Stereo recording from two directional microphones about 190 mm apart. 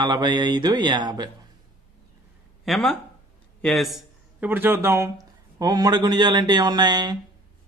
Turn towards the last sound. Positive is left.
turn(degrees=-20)  # may be behind; listen again after turning